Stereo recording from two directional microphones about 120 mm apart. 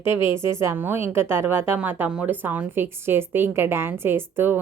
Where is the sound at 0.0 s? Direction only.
20° right (ahead or behind).